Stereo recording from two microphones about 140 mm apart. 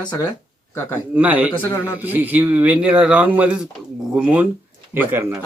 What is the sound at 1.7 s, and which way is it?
Speech, 20° left (ahead or behind).